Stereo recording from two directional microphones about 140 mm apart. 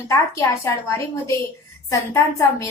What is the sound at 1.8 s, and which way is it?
Speech, 20° left (ahead or behind).